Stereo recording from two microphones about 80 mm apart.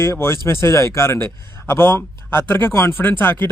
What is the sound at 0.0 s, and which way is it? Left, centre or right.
Speech, left.